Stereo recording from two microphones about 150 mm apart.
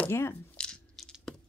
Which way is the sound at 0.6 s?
5° left (ahead or behind).